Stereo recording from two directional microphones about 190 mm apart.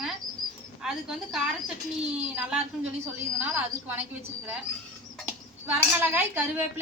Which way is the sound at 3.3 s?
10° right (ahead or behind).